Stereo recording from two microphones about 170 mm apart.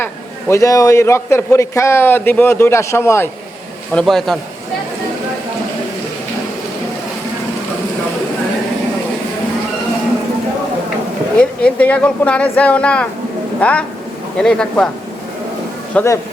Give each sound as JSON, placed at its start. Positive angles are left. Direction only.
{"t": 0.0, "sound": "a man's voice", "side_deg": 15}
{"t": 3.9, "sound": "speech", "side_deg": 0}
{"t": 11.3, "sound": "a man's voice", "side_deg": 10}
{"t": 15.9, "sound": "a man's voice", "side_deg": 5}